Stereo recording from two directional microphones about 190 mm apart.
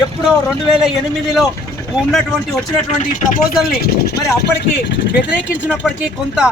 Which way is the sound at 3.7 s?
55° left (ahead or behind).